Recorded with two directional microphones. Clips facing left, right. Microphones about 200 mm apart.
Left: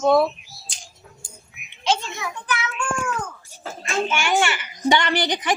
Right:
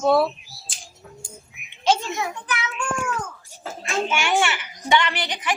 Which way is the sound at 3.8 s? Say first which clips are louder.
Left 1 dB; centre (ahead or behind).